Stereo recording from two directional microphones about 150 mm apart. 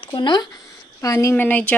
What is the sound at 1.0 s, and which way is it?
Speech, 20° left (ahead or behind).